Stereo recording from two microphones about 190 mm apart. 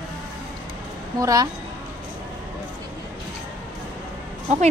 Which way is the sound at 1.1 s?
20° right (ahead or behind).